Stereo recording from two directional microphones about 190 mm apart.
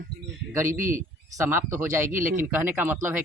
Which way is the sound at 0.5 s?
15° right (ahead or behind).